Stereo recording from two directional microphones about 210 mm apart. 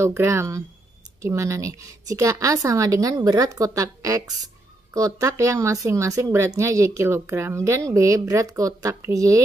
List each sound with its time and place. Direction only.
0.0 s speech: 10° right (ahead or behind)